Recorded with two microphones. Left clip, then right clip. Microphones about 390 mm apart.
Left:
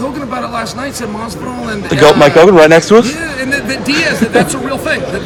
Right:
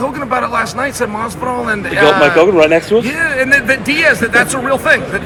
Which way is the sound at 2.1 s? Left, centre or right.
Left.